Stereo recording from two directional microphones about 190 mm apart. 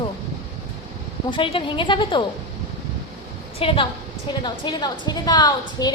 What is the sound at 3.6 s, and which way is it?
A woman's voice, 30° left (ahead or behind).